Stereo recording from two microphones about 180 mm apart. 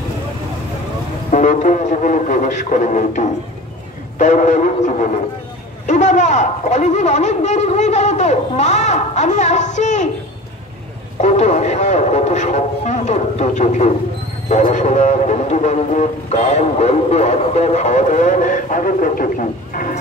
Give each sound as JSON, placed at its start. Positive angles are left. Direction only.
{"t": 1.3, "sound": "speech", "side_deg": 45}
{"t": 11.1, "sound": "speech", "side_deg": 35}